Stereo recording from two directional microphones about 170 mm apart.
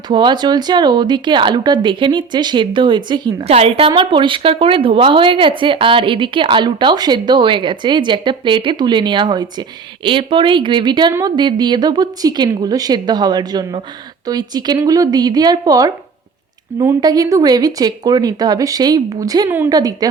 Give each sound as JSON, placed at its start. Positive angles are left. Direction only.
{"t": 0.1, "sound": "a woman's voice", "side_deg": -25}